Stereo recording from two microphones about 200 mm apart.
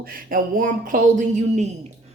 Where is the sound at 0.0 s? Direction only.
45° right (ahead or behind).